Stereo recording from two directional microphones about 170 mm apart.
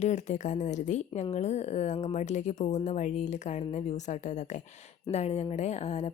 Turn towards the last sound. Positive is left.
turn(degrees=40)  # may be behind; listen again after turning